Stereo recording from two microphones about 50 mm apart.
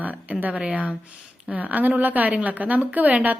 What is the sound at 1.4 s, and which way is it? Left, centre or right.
A woman's voice, right.